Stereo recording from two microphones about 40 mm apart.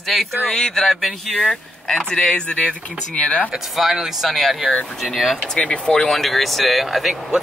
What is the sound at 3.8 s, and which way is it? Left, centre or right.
Speech, centre.